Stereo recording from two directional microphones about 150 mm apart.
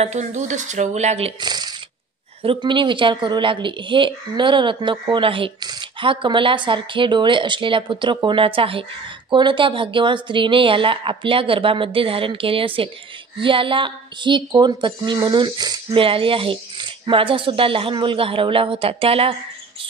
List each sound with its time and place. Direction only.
0.0 s speech: 50° right (ahead or behind)
1.4 s speech: 30° right (ahead or behind)